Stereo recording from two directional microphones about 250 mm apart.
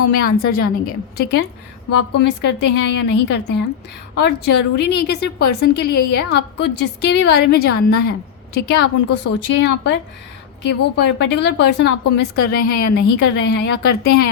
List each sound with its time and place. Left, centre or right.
0.2 s a woman's voice: left